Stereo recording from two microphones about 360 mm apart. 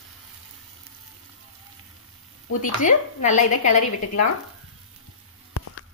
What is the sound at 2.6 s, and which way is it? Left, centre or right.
Speech, left.